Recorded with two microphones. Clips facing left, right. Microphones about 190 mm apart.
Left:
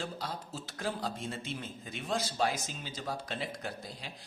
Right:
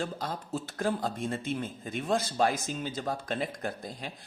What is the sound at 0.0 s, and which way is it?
A man's voice, 55° right (ahead or behind).